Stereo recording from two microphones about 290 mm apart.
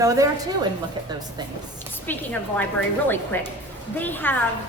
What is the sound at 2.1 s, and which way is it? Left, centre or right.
A woman's voice, centre.